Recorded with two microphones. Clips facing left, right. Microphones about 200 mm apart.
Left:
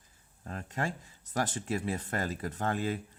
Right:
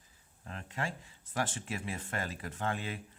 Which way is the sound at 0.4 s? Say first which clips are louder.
Left 4 dB; 40° left (ahead or behind).